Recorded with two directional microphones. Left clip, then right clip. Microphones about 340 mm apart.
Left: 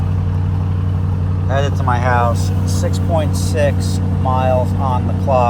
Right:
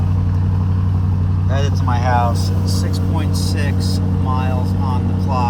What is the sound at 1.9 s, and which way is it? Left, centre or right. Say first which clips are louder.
Speech: left 1 dB; centre.